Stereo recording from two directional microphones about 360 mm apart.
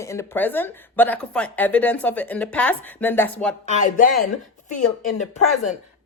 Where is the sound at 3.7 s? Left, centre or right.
Left.